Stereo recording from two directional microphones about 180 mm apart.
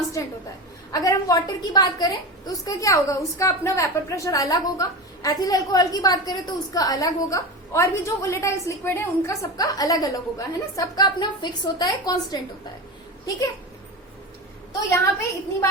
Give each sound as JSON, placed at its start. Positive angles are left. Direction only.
{"t": 0.2, "sound": "a woman's voice", "side_deg": 20}
{"t": 14.7, "sound": "a woman's voice", "side_deg": 15}